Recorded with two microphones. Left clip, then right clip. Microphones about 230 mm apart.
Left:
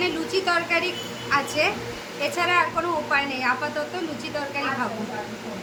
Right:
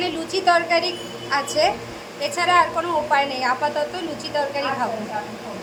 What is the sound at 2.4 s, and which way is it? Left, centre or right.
A woman's voice, centre.